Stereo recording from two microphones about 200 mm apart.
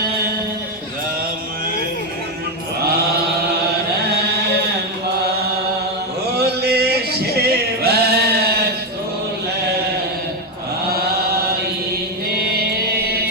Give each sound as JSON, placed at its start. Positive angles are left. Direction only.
{"t": 4.0, "sound": "chant", "side_deg": -55}
{"t": 6.3, "sound": "male singing", "side_deg": -50}
{"t": 10.8, "sound": "chant", "side_deg": -50}